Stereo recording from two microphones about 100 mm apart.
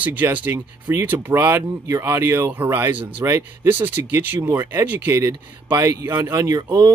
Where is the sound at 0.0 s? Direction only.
15° right (ahead or behind).